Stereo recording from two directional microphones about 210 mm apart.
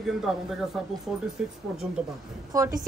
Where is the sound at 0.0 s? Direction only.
Centre (ahead or behind).